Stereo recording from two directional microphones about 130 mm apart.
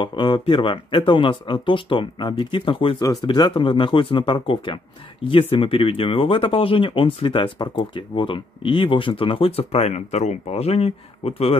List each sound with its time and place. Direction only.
0.0 s speech: 40° left (ahead or behind)
3.0 s speech: 30° left (ahead or behind); by 11.5 s 50° left (ahead or behind)